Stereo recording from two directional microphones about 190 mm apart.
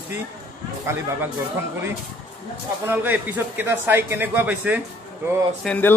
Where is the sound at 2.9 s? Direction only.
10° right (ahead or behind).